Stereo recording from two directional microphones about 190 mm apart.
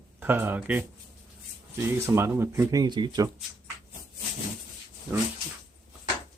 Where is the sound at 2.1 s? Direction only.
15° right (ahead or behind).